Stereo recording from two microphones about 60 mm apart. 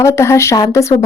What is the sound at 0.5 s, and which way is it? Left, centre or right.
Speech, left.